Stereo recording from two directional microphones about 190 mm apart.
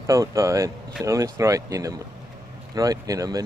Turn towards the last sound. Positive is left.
turn(degrees=-20)  # may be behind; listen again after turning